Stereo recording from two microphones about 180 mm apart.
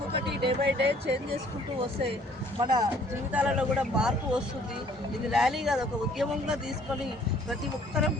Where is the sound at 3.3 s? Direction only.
10° right (ahead or behind).